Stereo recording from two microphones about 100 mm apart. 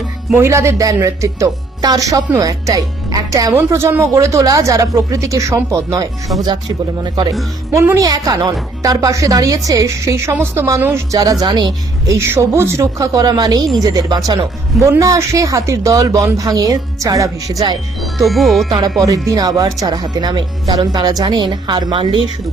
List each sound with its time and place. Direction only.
0.3 s speech: 30° right (ahead or behind)
3.5 s speech: 25° right (ahead or behind)
6.4 s speech: 45° right (ahead or behind)
7.7 s speech: 30° right (ahead or behind)
11.1 s speech: 40° right (ahead or behind)
11.4 s speech: 50° right (ahead or behind)
12.0 s speech: 30° right (ahead or behind)
18.3 s speech: centre (ahead or behind)
19.0 s speech: 35° right (ahead or behind); by 22.2 s 50° right (ahead or behind)